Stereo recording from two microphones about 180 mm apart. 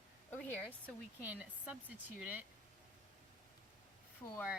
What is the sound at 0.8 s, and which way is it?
Speech, 10° right (ahead or behind).